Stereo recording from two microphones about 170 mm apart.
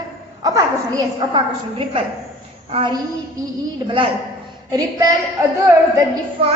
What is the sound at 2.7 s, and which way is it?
Speech, 35° right (ahead or behind).